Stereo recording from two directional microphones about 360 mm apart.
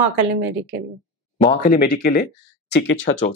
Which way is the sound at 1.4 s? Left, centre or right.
Centre.